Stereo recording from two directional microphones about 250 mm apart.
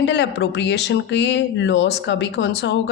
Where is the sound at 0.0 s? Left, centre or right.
Left.